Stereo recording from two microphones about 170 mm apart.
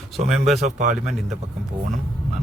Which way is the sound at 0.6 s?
45° right (ahead or behind).